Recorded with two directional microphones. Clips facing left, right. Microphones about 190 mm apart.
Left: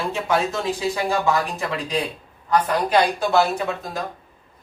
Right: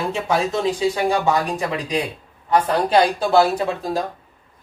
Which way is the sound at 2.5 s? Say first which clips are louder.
Right 2 dB; 30° right (ahead or behind).